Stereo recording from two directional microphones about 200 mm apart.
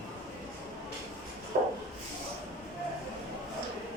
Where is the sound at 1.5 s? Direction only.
35° right (ahead or behind).